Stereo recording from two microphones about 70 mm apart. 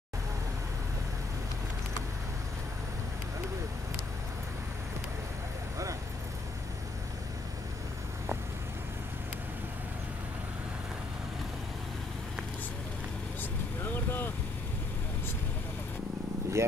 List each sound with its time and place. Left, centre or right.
13.4 s vehicle: left
16.6 s vehicle: right